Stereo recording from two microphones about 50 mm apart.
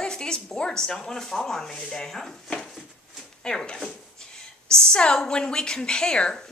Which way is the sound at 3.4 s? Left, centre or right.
Centre.